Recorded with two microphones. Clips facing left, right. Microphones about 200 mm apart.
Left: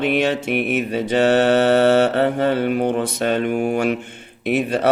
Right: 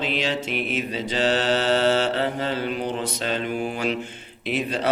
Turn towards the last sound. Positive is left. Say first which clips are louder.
# left 6 dB
turn(degrees=60)  # may be behind; listen again after turning